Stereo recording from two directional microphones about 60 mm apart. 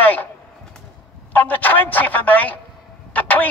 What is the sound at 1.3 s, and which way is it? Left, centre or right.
A woman's voice, left.